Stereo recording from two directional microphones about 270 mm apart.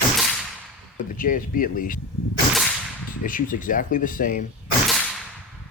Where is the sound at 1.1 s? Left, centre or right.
Left.